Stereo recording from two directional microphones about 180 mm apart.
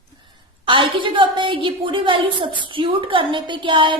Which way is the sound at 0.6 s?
30° right (ahead or behind).